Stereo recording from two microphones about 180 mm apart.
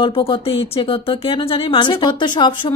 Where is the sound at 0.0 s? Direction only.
30° left (ahead or behind).